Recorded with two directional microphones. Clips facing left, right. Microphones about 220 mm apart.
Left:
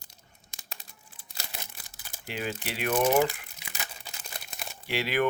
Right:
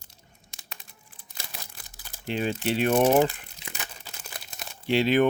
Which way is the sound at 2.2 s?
25° right (ahead or behind).